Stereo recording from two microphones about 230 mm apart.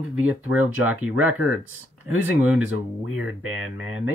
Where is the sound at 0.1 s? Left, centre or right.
Centre.